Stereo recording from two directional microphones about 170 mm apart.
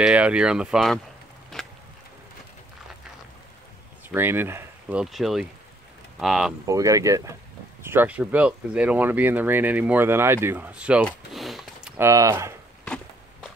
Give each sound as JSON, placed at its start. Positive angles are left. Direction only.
{"t": 0.0, "sound": "speech", "side_deg": -5}
{"t": 1.5, "sound": "a sound", "side_deg": 0}
{"t": 4.1, "sound": "speech", "side_deg": -10}
{"t": 5.0, "sound": "speech", "side_deg": 0}
{"t": 6.6, "sound": "speech", "side_deg": -20}
{"t": 11.1, "sound": "a sound", "side_deg": 0}
{"t": 12.0, "sound": "speech", "side_deg": -15}
{"t": 12.8, "sound": "walk", "side_deg": 5}